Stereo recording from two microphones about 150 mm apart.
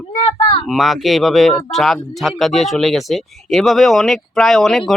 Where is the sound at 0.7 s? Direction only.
Centre (ahead or behind).